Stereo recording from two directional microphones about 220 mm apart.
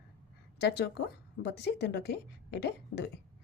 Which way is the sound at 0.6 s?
50° left (ahead or behind).